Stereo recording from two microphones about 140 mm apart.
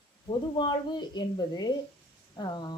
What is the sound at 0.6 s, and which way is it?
A woman's voice, 30° left (ahead or behind).